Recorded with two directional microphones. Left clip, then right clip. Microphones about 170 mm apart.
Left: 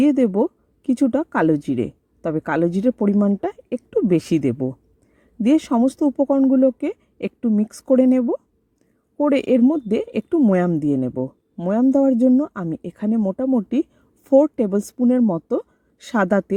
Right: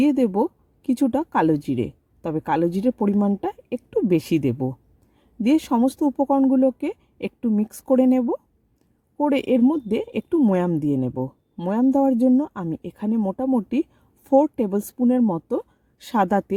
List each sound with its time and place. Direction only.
0.0 s a woman's voice: centre (ahead or behind)